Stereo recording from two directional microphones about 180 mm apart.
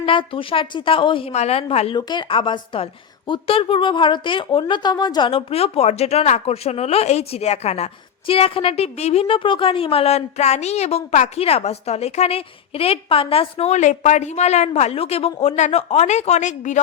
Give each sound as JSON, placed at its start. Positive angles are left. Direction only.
{"t": 0.0, "sound": "a woman's voice", "side_deg": 30}